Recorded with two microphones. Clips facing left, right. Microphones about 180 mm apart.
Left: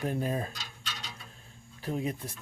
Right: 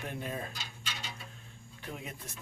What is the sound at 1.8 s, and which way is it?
Speech, 35° left (ahead or behind).